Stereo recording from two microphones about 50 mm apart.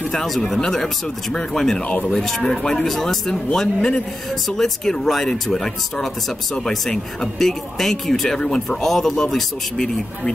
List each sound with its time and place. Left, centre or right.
0.1 s speech: centre
4.3 s speech: centre